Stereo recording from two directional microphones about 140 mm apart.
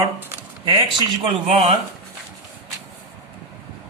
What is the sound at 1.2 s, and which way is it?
Speech, 50° right (ahead or behind).